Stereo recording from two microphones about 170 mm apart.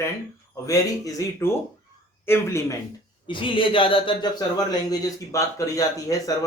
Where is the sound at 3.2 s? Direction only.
30° left (ahead or behind).